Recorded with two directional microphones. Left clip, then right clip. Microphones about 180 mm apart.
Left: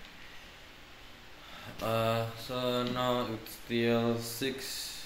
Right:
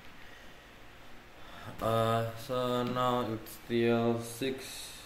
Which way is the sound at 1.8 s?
15° right (ahead or behind).